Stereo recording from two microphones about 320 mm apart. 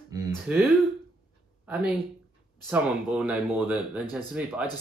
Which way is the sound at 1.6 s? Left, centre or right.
Centre.